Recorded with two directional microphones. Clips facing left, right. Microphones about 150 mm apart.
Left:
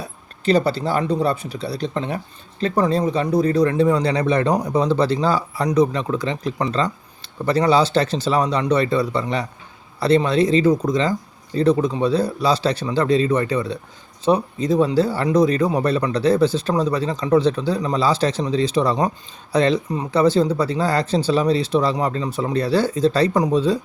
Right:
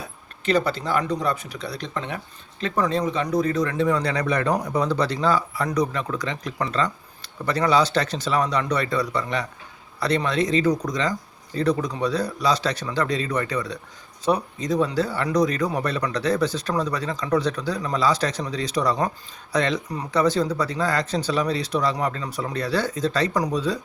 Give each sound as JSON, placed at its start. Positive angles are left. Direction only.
{"t": 0.4, "sound": "speech", "side_deg": 35}